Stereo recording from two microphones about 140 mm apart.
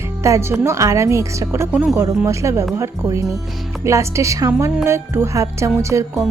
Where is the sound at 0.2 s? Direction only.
20° right (ahead or behind).